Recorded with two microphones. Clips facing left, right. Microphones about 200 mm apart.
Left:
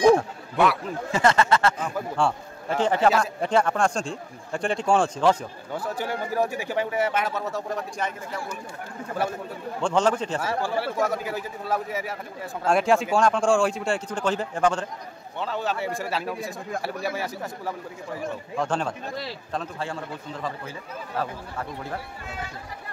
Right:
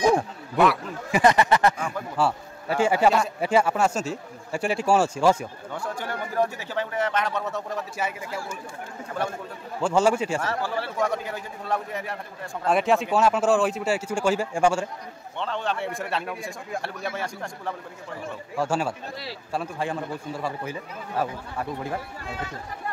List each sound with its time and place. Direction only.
1.1 s a man's voice: 15° right (ahead or behind)
5.8 s speech: 10° left (ahead or behind)
9.8 s a man's voice: 10° right (ahead or behind)
10.8 s a man's voice: 5° left (ahead or behind)
15.3 s a man's voice: 5° left (ahead or behind)
18.6 s a man's voice: 10° right (ahead or behind)